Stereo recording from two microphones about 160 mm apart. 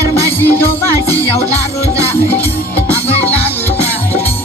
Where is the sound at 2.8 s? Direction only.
40° left (ahead or behind).